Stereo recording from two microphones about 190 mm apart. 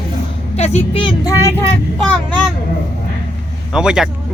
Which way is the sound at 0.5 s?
35° left (ahead or behind).